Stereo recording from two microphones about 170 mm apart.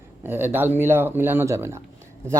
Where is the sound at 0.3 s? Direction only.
10° right (ahead or behind).